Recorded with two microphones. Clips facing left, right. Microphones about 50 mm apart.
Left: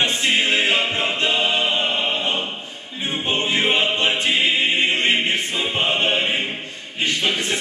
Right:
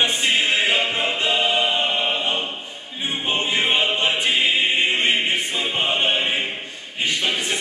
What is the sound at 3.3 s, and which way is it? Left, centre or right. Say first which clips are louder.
Music: left 1 dB; centre.